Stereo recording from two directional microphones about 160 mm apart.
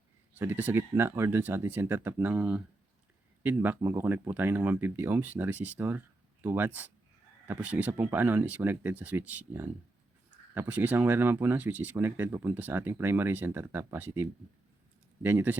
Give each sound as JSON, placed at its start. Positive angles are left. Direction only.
{"t": 0.3, "sound": "speech", "side_deg": -10}